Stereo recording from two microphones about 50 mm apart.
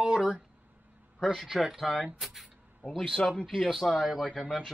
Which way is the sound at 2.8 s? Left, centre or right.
Right.